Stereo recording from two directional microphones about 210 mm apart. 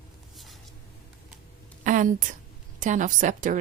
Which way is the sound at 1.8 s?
35° right (ahead or behind).